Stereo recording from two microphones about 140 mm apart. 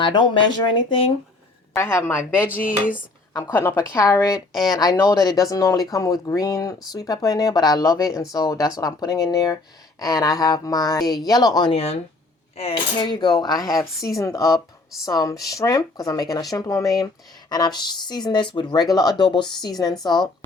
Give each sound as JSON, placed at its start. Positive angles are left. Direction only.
{"t": 0.0, "sound": "speech", "side_deg": 35}
{"t": 1.7, "sound": "a woman's voice", "side_deg": 20}
{"t": 3.5, "sound": "speech", "side_deg": 15}
{"t": 11.7, "sound": "speech", "side_deg": 45}
{"t": 13.0, "sound": "speech", "side_deg": 30}